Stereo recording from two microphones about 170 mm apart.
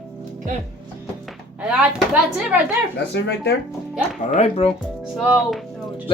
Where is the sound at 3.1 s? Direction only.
90° left.